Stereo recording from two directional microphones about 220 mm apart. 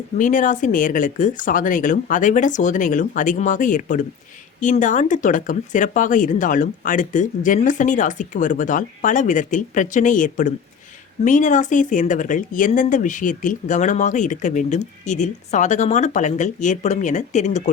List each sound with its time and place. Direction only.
0.2 s speech: 35° left (ahead or behind)